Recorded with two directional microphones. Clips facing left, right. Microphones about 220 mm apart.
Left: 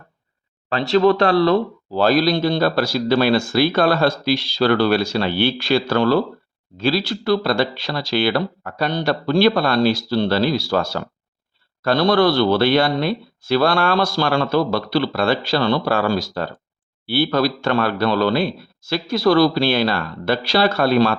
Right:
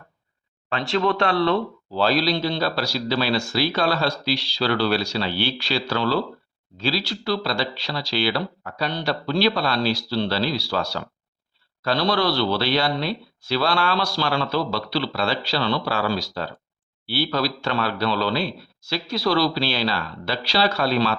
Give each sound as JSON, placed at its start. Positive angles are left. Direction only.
{"t": 0.7, "sound": "speech", "side_deg": 40}